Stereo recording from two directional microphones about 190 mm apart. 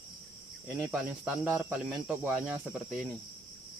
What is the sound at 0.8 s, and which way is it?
Speech, 5° right (ahead or behind).